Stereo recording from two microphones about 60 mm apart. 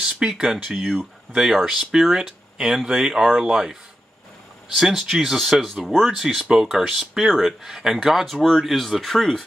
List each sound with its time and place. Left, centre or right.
0.0 s speech: centre
0.7 s speech: centre
1.3 s speech: centre